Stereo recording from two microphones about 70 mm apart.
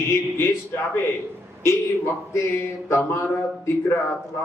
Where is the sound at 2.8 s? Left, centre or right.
Left.